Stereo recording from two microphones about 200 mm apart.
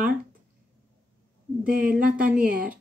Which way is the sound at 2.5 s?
45° right (ahead or behind).